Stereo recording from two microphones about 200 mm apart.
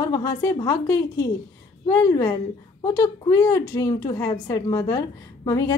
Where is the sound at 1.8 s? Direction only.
15° left (ahead or behind).